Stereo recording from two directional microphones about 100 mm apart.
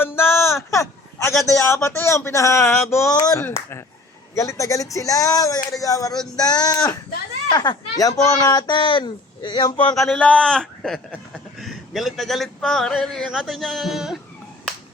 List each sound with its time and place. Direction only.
0.0 s a sound: 25° left (ahead or behind)
1.5 s speech: 30° left (ahead or behind)
2.6 s speech: 5° left (ahead or behind)
3.2 s speech: 35° left (ahead or behind)
3.4 s speech: 25° left (ahead or behind); by 9.9 s 50° left (ahead or behind)
9.9 s speech: 5° left (ahead or behind)